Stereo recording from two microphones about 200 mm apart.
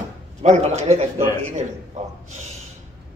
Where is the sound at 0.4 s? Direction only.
35° right (ahead or behind).